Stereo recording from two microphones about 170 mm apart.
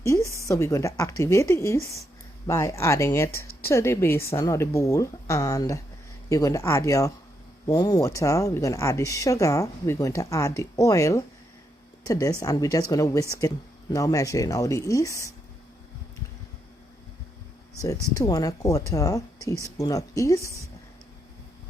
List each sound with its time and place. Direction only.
0.0 s a woman's voice: 20° left (ahead or behind)
17.7 s speech: 20° left (ahead or behind)